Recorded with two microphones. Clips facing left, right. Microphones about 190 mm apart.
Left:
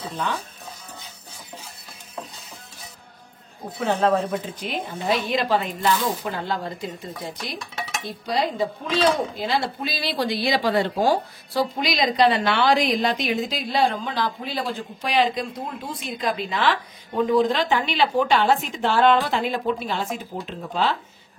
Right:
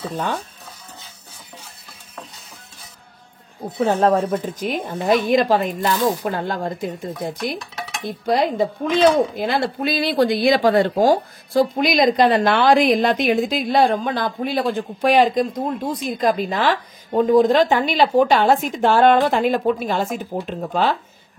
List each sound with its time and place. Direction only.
3.8 s speech: 45° right (ahead or behind)
8.0 s dishes: 55° right (ahead or behind)
9.4 s speech: 50° right (ahead or behind)